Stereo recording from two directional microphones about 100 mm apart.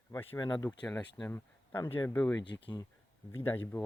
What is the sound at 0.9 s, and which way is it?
Speech, 5° left (ahead or behind).